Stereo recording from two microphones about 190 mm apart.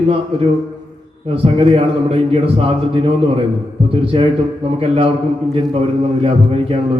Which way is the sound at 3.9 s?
30° right (ahead or behind).